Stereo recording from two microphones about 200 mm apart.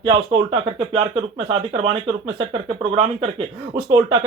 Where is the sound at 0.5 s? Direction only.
25° right (ahead or behind).